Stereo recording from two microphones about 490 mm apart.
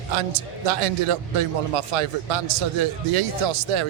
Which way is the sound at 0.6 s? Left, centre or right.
Right.